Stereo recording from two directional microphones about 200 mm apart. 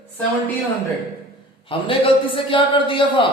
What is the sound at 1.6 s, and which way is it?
Speech, 25° left (ahead or behind).